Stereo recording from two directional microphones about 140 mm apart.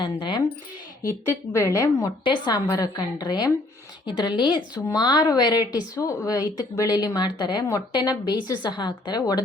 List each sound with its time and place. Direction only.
0.0 s speech: 35° left (ahead or behind)
1.0 s a woman's voice: 20° left (ahead or behind)